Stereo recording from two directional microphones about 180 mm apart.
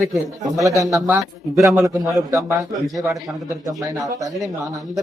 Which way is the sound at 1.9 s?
Centre (ahead or behind).